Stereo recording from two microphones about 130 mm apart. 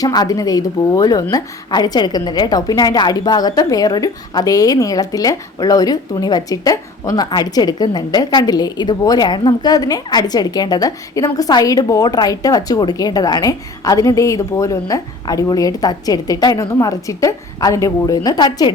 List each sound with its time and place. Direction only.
0.0 s a woman's voice: 30° left (ahead or behind)